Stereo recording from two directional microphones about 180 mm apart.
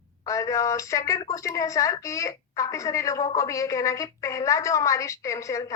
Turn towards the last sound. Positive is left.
turn(degrees=15)  # may be behind; listen again after turning